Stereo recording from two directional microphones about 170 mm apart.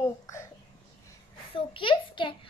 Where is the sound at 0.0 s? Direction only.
15° left (ahead or behind).